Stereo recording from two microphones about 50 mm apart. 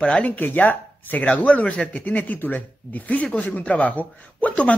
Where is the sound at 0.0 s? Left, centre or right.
Centre.